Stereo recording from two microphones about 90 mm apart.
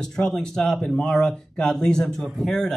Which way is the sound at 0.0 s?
5° left (ahead or behind).